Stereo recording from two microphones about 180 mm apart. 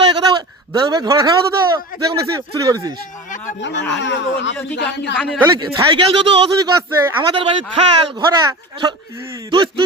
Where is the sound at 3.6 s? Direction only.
90° left.